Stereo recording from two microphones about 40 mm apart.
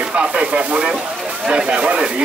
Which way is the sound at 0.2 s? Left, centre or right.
Right.